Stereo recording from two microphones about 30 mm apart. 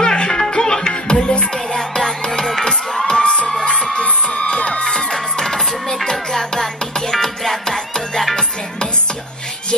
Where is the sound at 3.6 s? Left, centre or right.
Left.